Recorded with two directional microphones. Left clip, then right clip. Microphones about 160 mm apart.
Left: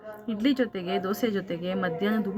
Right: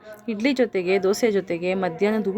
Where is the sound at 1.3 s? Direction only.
50° right (ahead or behind).